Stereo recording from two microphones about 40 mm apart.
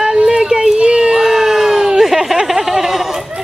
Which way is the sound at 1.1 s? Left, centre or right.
Centre.